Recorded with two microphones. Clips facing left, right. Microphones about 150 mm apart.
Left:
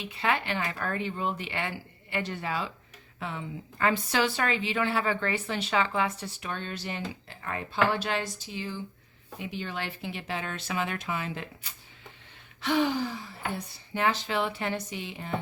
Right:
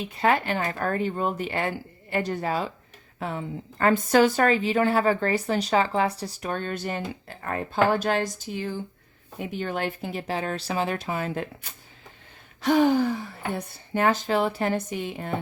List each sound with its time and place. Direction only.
0.0 s a woman's voice: 45° right (ahead or behind)